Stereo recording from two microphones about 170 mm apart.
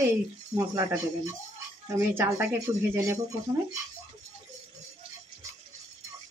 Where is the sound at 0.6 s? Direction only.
20° right (ahead or behind).